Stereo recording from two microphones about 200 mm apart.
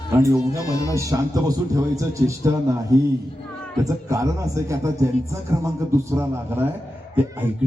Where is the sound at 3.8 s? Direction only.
15° right (ahead or behind).